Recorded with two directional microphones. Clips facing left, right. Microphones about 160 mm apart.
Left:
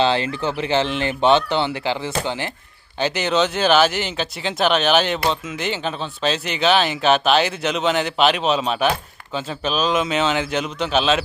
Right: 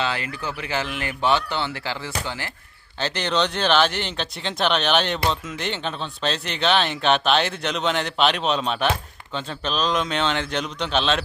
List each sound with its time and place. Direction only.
0.0 s speech: 30° left (ahead or behind)
3.0 s speech: 5° left (ahead or behind)